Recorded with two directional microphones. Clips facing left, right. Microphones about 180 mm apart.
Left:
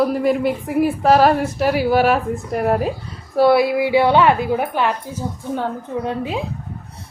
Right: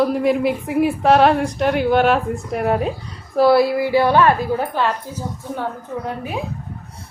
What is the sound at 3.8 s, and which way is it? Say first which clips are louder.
A woman's voice: left 1 dB; 20° left (ahead or behind).